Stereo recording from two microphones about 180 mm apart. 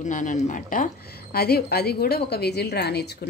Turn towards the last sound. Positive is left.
turn(degrees=65)  # may be behind; listen again after turning